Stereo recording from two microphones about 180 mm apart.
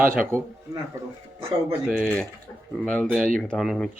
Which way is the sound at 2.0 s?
5° left (ahead or behind).